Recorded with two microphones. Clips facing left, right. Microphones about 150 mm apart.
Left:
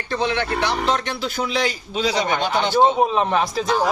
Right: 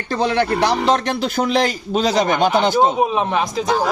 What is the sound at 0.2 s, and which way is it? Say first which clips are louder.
A man's voice: right 6 dB; 40° right (ahead or behind).